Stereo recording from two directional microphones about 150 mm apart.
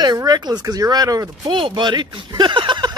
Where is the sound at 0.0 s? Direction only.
25° right (ahead or behind).